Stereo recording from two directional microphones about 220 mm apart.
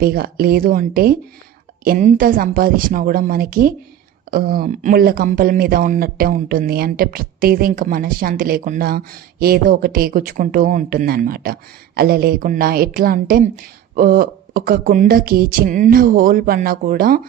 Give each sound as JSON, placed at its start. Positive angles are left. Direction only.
{"t": 0.0, "sound": "speech", "side_deg": -45}